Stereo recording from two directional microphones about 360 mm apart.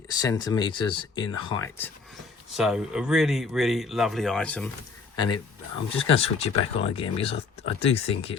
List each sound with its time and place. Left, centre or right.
0.2 s speech: centre
2.6 s speech: centre
5.9 s speech: centre